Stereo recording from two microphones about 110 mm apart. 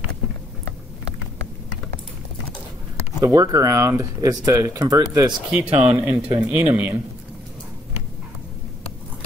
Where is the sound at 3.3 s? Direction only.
30° right (ahead or behind).